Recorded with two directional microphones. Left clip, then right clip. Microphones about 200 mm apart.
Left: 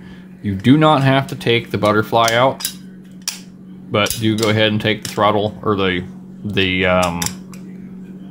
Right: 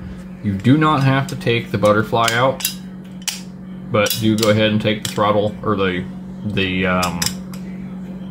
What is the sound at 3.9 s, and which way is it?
Speech, 55° left (ahead or behind).